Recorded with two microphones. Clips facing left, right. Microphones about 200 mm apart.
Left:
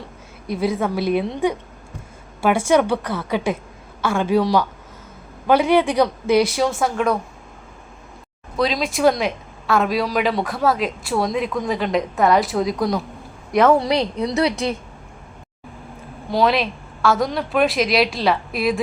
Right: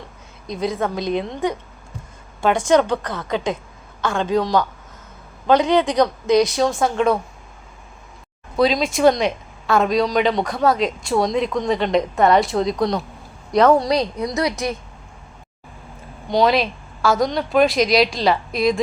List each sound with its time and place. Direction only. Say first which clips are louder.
0.4 s speech: left 2 dB; 10° left (ahead or behind)
2.4 s speech: even; 10° left (ahead or behind)
8.5 s a woman's voice: right 3 dB; centre (ahead or behind)
13.7 s a woman's voice: even; 25° left (ahead or behind)
16.3 s a woman's voice: right 1 dB; centre (ahead or behind)